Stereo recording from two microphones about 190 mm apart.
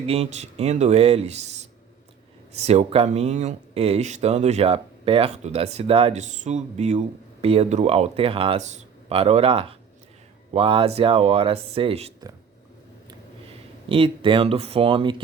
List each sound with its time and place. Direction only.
0.0 s speech: 30° right (ahead or behind)
13.8 s speech: 30° right (ahead or behind)